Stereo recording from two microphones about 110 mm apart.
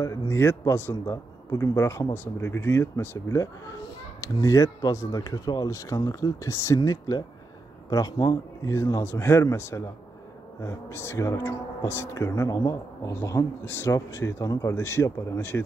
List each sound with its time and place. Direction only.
0.0 s a man's voice: 25° left (ahead or behind)